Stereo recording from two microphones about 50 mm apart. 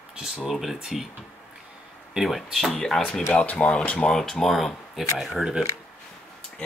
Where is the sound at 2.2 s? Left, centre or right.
Centre.